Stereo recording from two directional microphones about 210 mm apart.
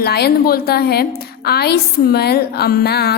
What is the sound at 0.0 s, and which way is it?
A woman's voice, 50° left (ahead or behind).